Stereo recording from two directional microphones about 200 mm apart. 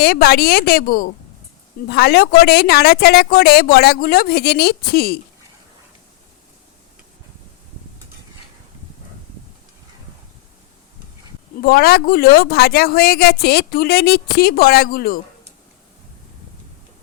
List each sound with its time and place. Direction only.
0.0 s a woman's voice: 50° left (ahead or behind)
11.6 s a woman's voice: 50° left (ahead or behind)